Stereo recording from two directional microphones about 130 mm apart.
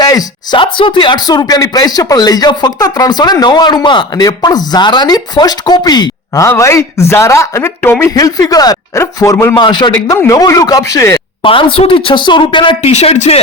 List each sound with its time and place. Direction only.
0.0 s speech: 30° left (ahead or behind)
9.6 s speech: 35° left (ahead or behind)
11.4 s speech: 40° left (ahead or behind)
12.9 s speech: 55° left (ahead or behind)